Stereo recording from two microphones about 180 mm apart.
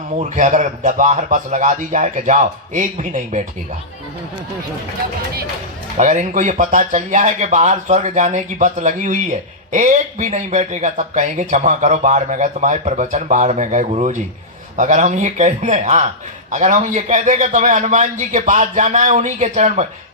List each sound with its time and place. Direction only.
0.2 s speech: 45° right (ahead or behind)
6.0 s speech: 45° right (ahead or behind)